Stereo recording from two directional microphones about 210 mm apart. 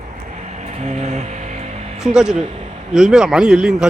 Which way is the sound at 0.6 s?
35° right (ahead or behind).